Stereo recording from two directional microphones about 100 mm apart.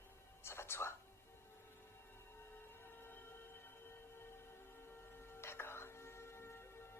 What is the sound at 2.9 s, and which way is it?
Music, 20° left (ahead or behind).